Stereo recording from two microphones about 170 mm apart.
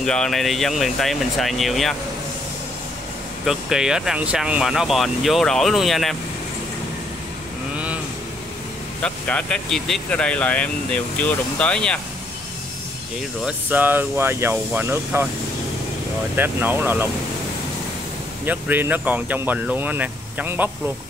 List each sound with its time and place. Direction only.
0.0 s speech: 5° left (ahead or behind)
3.4 s speech: 5° right (ahead or behind)
7.7 s vehicle: 10° right (ahead or behind)
9.0 s speech: 5° left (ahead or behind)
13.5 s speech: 10° right (ahead or behind)
16.3 s speech: 10° right (ahead or behind)
18.4 s speech: 10° right (ahead or behind)